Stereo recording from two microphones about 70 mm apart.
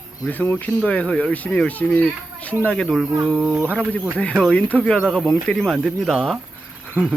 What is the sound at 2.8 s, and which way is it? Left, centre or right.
Speech, centre.